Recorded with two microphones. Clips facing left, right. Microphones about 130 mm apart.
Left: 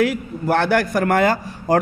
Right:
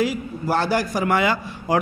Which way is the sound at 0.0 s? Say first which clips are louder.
Left 3 dB; 60° left (ahead or behind).